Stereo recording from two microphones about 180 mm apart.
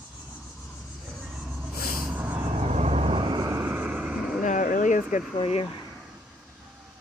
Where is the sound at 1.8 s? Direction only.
55° left (ahead or behind).